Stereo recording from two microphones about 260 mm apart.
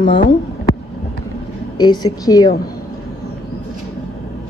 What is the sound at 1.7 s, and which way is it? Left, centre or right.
Speech, centre.